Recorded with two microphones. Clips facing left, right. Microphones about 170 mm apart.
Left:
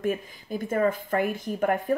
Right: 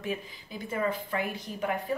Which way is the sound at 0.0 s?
50° left (ahead or behind).